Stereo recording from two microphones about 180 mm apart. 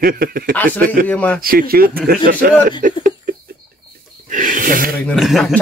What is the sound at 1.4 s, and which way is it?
Speech, 55° right (ahead or behind).